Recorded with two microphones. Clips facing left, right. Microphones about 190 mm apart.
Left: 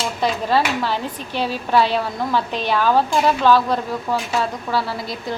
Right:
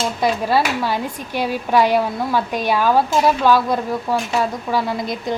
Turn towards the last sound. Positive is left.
turn(degrees=-15)  # may be behind; listen again after turning